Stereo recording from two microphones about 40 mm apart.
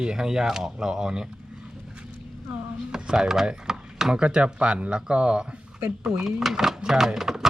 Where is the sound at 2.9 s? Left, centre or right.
Centre.